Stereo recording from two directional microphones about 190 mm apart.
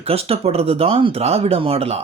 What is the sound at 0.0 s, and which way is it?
Speech, 30° right (ahead or behind).